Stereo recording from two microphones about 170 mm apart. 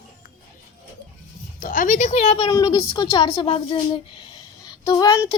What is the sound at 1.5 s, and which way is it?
A woman's voice, 55° left (ahead or behind).